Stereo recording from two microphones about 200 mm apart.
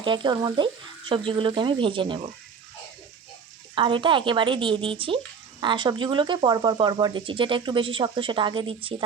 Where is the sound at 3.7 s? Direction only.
25° right (ahead or behind).